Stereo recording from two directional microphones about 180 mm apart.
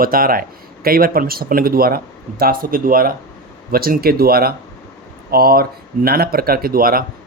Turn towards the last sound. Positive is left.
turn(degrees=-55)  # may be behind; listen again after turning